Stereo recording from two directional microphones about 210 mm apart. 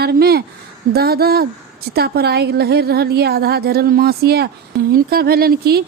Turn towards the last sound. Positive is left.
turn(degrees=-45)  # may be behind; listen again after turning